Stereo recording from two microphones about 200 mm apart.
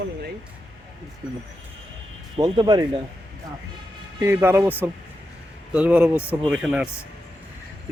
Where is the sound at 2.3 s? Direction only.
25° right (ahead or behind).